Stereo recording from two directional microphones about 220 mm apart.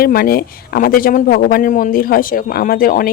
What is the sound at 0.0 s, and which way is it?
Speech, 45° left (ahead or behind).